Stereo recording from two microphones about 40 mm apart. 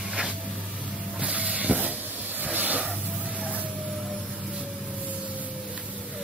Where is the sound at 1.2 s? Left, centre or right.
Right.